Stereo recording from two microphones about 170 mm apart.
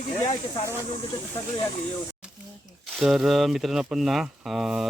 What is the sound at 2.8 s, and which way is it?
Speech, centre (ahead or behind).